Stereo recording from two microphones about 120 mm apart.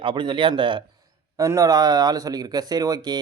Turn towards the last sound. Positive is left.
turn(degrees=-35)  # may be behind; listen again after turning